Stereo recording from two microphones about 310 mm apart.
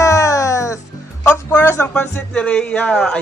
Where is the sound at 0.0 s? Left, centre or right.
Centre.